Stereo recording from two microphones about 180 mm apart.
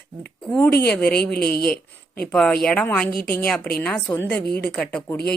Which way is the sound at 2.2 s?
5° left (ahead or behind).